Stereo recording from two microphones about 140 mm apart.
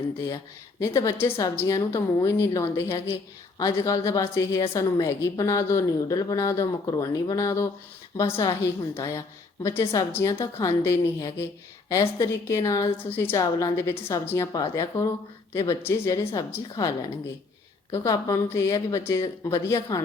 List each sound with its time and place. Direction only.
0.8 s a woman's voice: 20° left (ahead or behind)